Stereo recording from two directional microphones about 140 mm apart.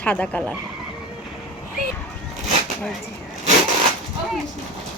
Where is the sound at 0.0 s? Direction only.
10° left (ahead or behind).